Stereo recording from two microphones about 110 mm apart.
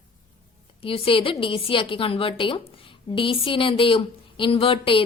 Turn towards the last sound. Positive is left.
turn(degrees=55)  # may be behind; listen again after turning